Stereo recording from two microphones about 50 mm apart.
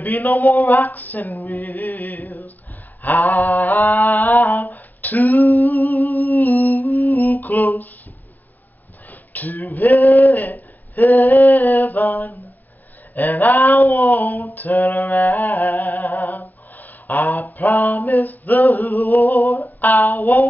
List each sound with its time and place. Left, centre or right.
0.0 s speech: left
3.0 s a sound: left
9.1 s a sound: left
13.1 s speech: left
14.5 s humming: left
19.6 s speech: left